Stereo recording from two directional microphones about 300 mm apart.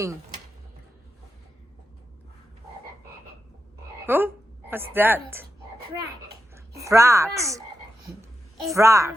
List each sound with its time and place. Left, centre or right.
4.0 s frog: centre
4.7 s a woman's voice: centre
6.5 s speech: centre
8.6 s a woman's voice: centre